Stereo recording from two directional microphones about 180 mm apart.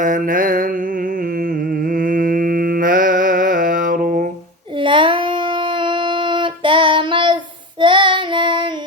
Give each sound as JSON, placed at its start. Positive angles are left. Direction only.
{"t": 0.0, "sound": "mantra", "side_deg": -50}
{"t": 1.9, "sound": "mantra", "side_deg": -50}
{"t": 4.8, "sound": "child singing", "side_deg": -25}